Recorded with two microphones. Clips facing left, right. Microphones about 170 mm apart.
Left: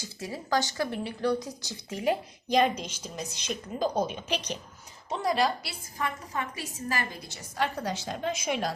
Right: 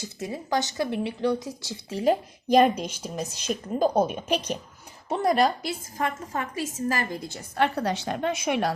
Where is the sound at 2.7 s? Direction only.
10° right (ahead or behind).